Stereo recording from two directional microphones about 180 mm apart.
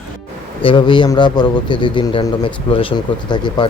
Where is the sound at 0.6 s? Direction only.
25° left (ahead or behind).